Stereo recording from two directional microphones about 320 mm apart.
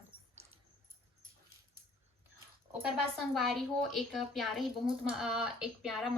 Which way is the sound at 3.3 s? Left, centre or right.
Centre.